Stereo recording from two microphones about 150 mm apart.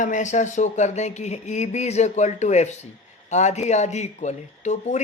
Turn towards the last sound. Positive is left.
turn(degrees=50)  # may be behind; listen again after turning